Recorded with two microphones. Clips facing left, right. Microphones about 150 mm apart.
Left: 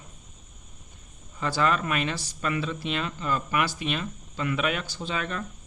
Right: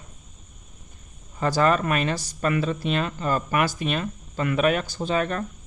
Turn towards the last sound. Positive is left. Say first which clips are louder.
# right 7 dB
turn(degrees=-45)  # may be behind; listen again after turning